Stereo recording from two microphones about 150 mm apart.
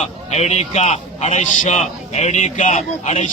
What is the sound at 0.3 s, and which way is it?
A man's voice, 45° left (ahead or behind).